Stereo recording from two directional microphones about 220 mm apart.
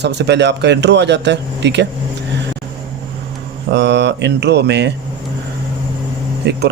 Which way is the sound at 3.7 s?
50° right (ahead or behind).